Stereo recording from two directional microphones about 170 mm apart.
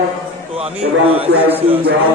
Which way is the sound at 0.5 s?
35° right (ahead or behind).